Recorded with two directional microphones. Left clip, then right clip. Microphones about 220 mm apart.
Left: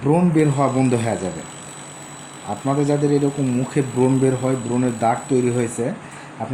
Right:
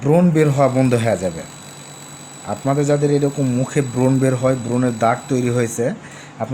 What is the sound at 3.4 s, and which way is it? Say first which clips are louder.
Speech: right 2 dB; 50° right (ahead or behind).